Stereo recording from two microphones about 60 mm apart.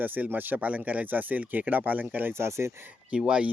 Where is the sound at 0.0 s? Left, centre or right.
Right.